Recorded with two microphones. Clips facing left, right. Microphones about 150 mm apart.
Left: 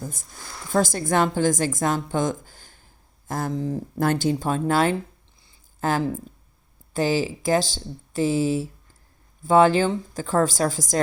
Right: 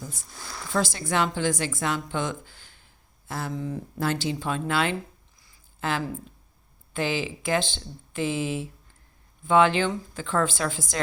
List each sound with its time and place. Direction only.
0.7 s a woman's voice: 45° left (ahead or behind)
4.0 s a woman's voice: 50° left (ahead or behind)